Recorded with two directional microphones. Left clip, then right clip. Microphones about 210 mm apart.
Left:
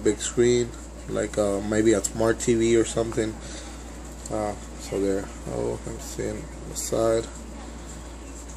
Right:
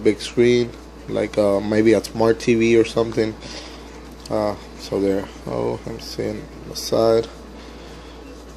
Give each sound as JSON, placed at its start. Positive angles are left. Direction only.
{"t": 0.0, "sound": "speech", "side_deg": -20}
{"t": 4.3, "sound": "speech", "side_deg": -35}